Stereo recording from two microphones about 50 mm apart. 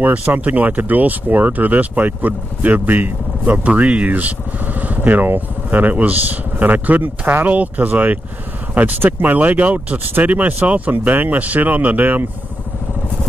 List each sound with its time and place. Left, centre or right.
0.0 s speech: right